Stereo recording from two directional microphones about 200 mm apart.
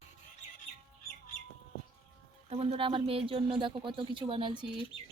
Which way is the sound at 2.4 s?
30° right (ahead or behind).